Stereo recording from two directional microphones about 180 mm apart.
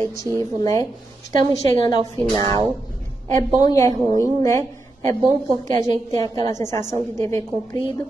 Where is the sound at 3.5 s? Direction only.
20° left (ahead or behind).